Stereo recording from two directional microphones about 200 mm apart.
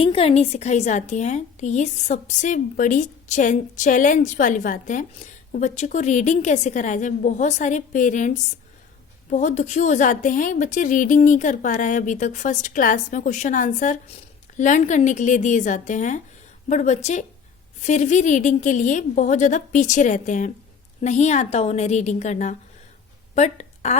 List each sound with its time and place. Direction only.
0.0 s a woman's voice: 30° left (ahead or behind)